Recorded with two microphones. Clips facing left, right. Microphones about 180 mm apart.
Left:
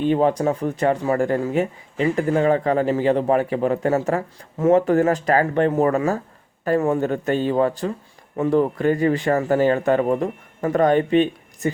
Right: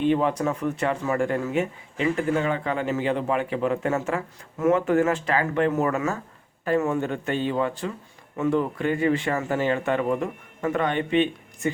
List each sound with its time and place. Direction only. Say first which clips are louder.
0.0 s speech: left 4 dB; 35° left (ahead or behind)